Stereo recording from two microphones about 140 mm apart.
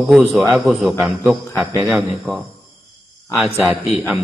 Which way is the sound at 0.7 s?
Centre (ahead or behind).